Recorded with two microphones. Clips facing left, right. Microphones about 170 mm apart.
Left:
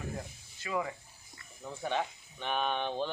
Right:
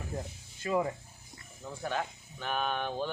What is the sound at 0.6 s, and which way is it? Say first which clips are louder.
Speech: right 5 dB; 35° right (ahead or behind).